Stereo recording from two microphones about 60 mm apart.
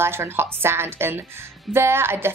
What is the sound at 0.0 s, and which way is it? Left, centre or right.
Speech, right.